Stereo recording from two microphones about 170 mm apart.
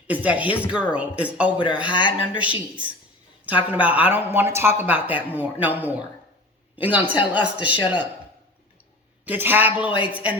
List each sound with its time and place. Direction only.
0.1 s speech: 10° right (ahead or behind)
1.9 s speech: 30° left (ahead or behind)
2.4 s speech: 10° right (ahead or behind)
7.8 s speech: 25° left (ahead or behind)
9.2 s speech: 10° right (ahead or behind)